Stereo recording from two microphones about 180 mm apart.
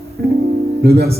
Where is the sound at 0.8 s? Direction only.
60° right (ahead or behind).